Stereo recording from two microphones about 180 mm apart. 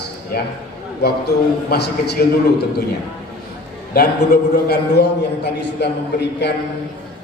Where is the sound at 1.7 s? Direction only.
60° left (ahead or behind).